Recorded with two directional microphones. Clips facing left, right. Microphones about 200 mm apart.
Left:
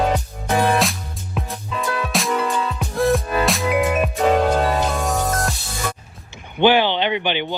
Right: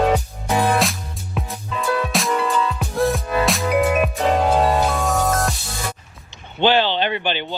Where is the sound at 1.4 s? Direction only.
Centre (ahead or behind).